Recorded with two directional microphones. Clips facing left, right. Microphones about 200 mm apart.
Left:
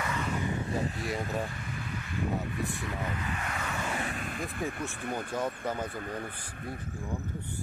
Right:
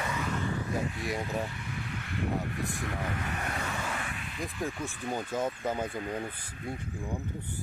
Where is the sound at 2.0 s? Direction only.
65° right (ahead or behind).